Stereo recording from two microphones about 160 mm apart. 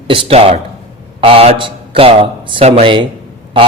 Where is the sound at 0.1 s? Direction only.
35° right (ahead or behind).